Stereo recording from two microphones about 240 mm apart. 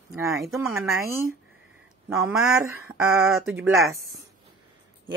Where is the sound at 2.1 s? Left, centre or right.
Centre.